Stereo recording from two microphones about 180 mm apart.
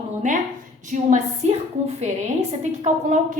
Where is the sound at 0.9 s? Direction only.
40° right (ahead or behind).